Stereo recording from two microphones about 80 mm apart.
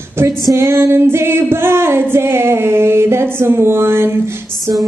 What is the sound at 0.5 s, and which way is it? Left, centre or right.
Female singing, right.